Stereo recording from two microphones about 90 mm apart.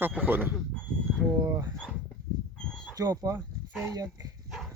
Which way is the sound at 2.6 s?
10° left (ahead or behind).